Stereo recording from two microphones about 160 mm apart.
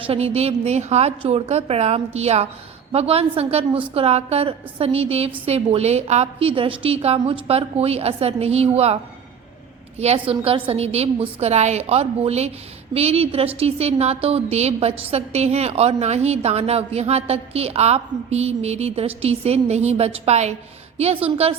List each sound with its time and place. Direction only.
0.1 s a woman's voice: 40° right (ahead or behind)
10.0 s a woman's voice: 40° right (ahead or behind)